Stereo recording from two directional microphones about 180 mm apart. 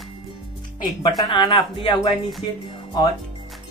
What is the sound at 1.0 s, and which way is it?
Speech, 20° left (ahead or behind).